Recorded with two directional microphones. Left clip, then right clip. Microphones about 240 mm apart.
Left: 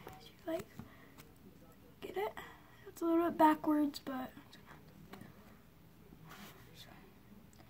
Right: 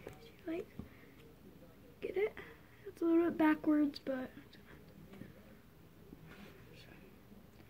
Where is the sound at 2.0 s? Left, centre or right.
Centre.